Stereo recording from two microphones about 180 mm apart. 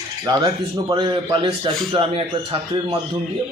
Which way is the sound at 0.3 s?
25° right (ahead or behind).